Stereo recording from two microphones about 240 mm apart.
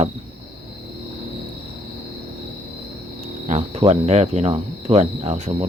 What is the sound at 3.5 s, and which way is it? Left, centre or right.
Cricket, right.